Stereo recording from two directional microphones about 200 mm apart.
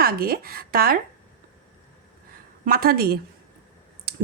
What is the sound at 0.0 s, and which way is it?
Speech, 50° right (ahead or behind).